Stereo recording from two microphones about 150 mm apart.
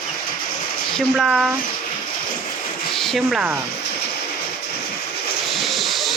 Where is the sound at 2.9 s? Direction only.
Centre (ahead or behind).